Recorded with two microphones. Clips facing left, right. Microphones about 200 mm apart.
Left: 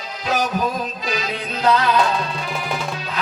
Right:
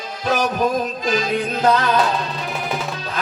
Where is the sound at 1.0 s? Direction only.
50° right (ahead or behind).